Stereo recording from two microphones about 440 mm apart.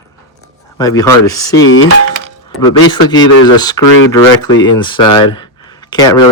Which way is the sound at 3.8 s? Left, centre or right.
Left.